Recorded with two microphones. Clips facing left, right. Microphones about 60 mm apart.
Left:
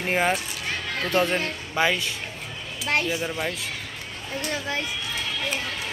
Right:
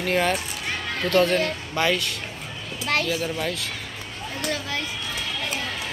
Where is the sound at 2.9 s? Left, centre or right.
Left.